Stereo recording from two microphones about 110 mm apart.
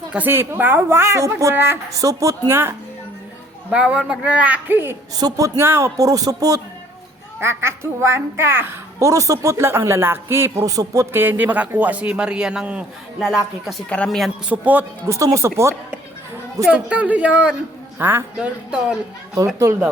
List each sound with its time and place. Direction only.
0.1 s a woman's voice: 15° right (ahead or behind)
3.7 s a man's voice: 10° right (ahead or behind)
5.1 s a man's voice: 35° right (ahead or behind); by 14.3 s 5° left (ahead or behind)
14.5 s a man's voice: 15° right (ahead or behind)
15.0 s a woman's voice: 30° right (ahead or behind)
16.6 s a man's voice: 10° right (ahead or behind)